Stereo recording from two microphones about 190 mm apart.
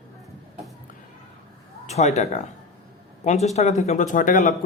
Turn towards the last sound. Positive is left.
turn(degrees=45)  # may be behind; listen again after turning